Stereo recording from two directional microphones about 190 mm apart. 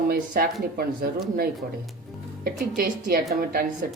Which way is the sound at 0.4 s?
50° right (ahead or behind).